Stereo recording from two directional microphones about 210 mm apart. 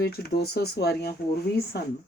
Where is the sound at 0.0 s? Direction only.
50° left (ahead or behind).